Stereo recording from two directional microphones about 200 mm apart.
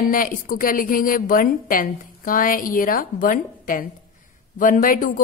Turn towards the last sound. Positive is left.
turn(degrees=40)  # may be behind; listen again after turning